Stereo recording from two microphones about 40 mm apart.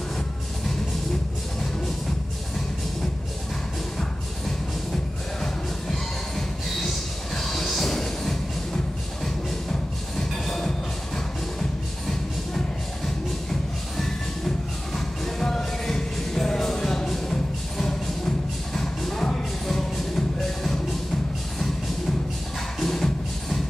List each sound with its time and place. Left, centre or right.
5.4 s music: centre
10.4 s music: centre
12.1 s music: centre
22.8 s music: centre